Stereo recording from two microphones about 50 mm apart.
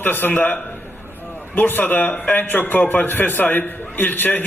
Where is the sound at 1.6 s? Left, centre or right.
Left.